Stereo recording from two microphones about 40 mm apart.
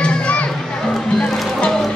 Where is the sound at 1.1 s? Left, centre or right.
Centre.